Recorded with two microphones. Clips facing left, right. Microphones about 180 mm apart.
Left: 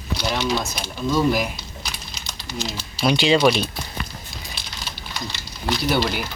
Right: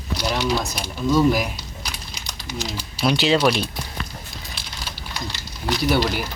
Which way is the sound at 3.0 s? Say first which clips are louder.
Left 1 dB; centre (ahead or behind).